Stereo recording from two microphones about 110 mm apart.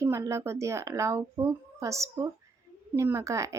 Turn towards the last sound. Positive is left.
turn(degrees=-30)  # may be behind; listen again after turning